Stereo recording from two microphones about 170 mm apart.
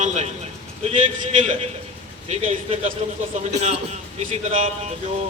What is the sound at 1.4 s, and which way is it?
A man's voice, 45° right (ahead or behind).